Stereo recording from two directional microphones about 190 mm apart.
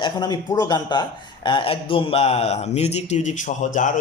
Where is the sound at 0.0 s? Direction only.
20° left (ahead or behind).